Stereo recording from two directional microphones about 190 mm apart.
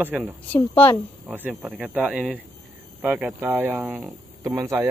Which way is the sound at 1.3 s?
5° right (ahead or behind).